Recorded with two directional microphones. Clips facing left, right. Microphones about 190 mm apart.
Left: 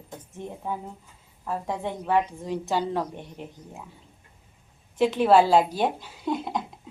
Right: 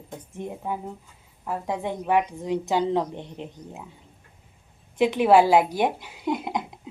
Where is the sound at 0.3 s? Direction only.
15° right (ahead or behind).